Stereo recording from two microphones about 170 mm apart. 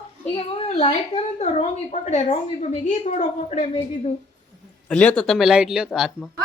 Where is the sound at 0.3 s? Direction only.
40° left (ahead or behind).